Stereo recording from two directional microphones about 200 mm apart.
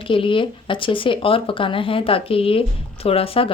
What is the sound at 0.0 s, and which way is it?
Speech, 25° left (ahead or behind).